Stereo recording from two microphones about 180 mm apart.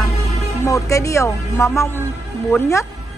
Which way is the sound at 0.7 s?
15° left (ahead or behind).